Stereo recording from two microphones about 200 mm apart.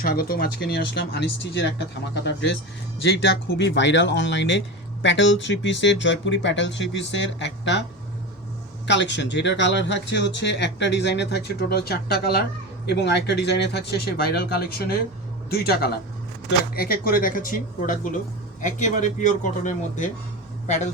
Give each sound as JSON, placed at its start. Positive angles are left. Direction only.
{"t": 0.0, "sound": "speech", "side_deg": 50}
{"t": 8.9, "sound": "a man's voice", "side_deg": 60}